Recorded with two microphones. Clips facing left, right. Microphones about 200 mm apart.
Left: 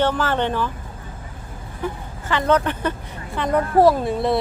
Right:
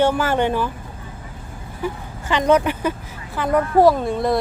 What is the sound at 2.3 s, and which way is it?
Speech, 15° right (ahead or behind).